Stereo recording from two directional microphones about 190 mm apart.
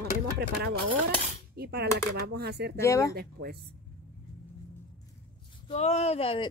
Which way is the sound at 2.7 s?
15° left (ahead or behind).